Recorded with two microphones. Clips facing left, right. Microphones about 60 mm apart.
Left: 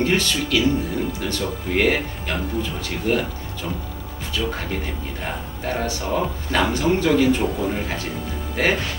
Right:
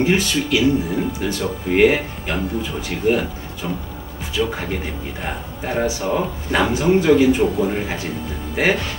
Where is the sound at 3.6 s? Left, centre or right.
Right.